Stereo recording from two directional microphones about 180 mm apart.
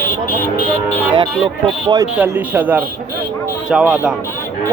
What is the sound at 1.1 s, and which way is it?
Speech, 25° right (ahead or behind).